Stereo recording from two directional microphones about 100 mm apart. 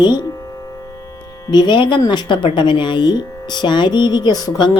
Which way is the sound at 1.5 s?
50° left (ahead or behind).